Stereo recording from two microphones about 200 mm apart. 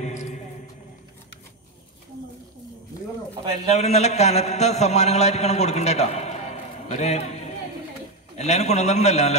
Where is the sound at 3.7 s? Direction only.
35° left (ahead or behind).